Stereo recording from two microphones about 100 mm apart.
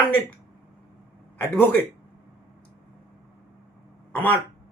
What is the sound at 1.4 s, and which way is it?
Speech, 20° left (ahead or behind).